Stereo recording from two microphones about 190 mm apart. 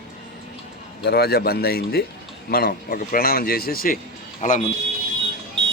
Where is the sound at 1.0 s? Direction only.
60° left (ahead or behind).